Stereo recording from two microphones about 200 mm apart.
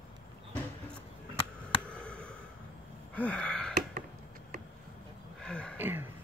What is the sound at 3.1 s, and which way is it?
Wheeze, 5° left (ahead or behind).